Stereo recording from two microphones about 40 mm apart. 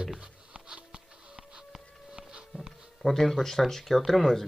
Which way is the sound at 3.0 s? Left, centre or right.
Centre.